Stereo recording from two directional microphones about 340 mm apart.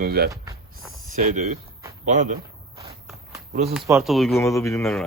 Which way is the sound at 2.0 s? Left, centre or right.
Right.